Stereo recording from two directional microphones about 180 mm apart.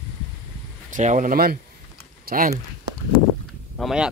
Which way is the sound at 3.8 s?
Centre (ahead or behind).